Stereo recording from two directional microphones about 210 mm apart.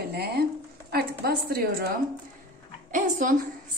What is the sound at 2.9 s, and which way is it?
Speech, 40° right (ahead or behind).